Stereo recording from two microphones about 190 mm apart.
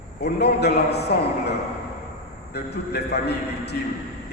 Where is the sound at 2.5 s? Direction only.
60° left (ahead or behind).